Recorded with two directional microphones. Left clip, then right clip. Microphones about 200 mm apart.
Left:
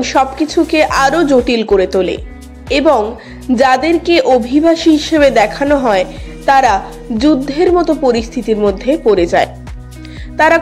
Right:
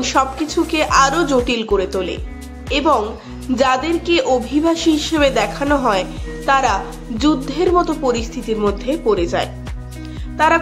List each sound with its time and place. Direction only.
0.0 s a woman's voice: 15° left (ahead or behind)